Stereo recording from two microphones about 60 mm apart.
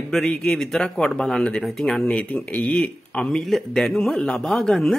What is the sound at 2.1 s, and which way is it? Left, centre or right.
Speech, left.